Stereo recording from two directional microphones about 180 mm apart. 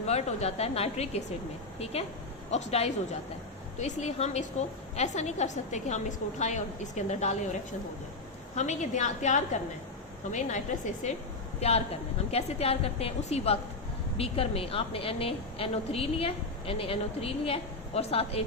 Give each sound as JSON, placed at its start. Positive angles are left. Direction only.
{"t": 0.0, "sound": "a woman's voice", "side_deg": 35}
{"t": 8.5, "sound": "a woman's voice", "side_deg": 40}